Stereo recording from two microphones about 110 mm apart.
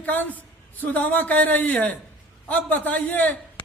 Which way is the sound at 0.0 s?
15° left (ahead or behind).